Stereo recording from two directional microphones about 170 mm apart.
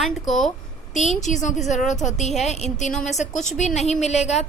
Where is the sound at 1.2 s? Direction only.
45° left (ahead or behind).